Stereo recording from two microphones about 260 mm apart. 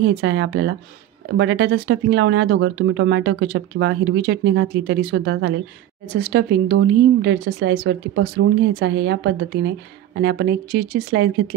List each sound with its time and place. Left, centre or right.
0.0 s speech: right